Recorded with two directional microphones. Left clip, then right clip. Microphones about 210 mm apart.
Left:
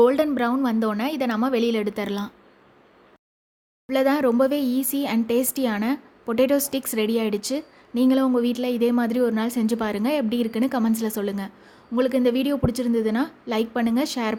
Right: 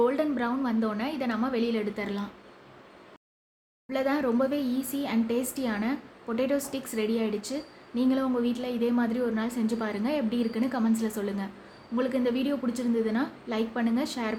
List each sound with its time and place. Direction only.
0.0 s speech: 45° left (ahead or behind)
3.8 s speech: 45° left (ahead or behind)